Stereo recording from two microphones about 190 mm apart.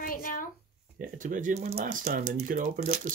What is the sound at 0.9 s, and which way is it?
Speech, 45° right (ahead or behind).